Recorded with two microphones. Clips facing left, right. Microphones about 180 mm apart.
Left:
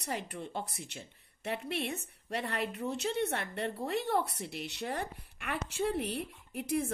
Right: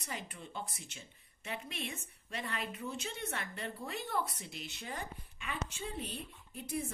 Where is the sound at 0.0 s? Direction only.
65° left (ahead or behind).